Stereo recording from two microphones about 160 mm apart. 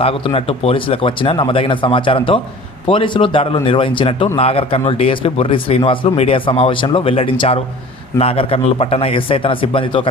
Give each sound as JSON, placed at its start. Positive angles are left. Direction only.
{"t": 0.0, "sound": "speech", "side_deg": 35}